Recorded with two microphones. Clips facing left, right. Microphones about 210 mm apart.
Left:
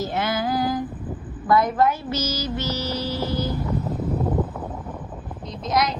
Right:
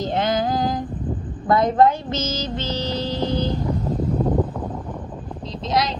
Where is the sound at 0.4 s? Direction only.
20° right (ahead or behind).